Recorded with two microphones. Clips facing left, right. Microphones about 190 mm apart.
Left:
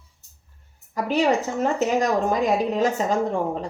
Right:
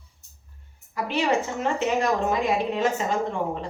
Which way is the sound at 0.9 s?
40° left (ahead or behind).